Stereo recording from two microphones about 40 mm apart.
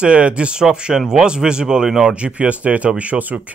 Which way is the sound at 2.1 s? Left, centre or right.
Right.